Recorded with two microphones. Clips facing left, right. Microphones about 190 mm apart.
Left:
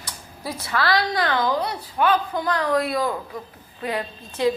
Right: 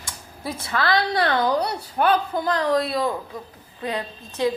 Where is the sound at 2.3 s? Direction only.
25° right (ahead or behind).